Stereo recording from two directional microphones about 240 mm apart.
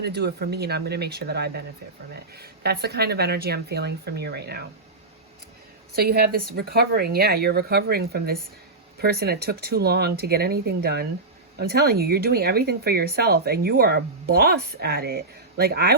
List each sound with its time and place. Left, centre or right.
0.0 s speech: right
6.0 s speech: right